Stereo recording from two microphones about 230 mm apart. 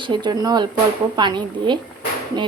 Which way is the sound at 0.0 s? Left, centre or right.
Centre.